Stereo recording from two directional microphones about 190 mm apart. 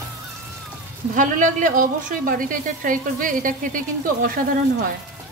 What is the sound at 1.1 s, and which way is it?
A woman's voice, 45° right (ahead or behind).